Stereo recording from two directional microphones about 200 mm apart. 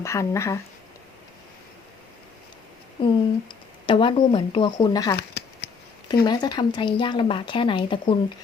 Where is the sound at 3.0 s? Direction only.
25° left (ahead or behind).